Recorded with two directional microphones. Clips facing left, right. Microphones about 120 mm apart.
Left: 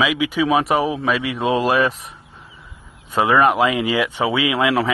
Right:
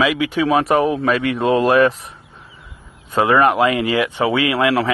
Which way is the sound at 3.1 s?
20° left (ahead or behind).